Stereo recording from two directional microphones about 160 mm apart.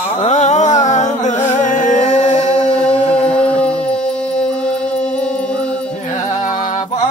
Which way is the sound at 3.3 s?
5° left (ahead or behind).